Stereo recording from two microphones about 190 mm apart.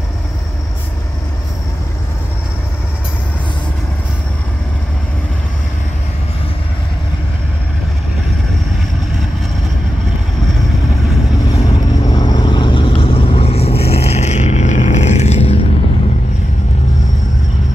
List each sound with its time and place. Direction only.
11.5 s vehicle: 20° left (ahead or behind)